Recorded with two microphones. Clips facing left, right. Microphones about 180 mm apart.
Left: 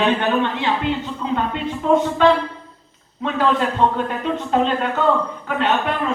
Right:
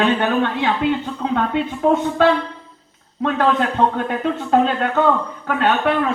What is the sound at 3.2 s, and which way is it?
A man's voice, 55° right (ahead or behind).